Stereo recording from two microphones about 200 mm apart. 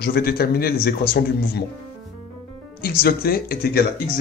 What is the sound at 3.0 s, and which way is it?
Speech, 50° left (ahead or behind).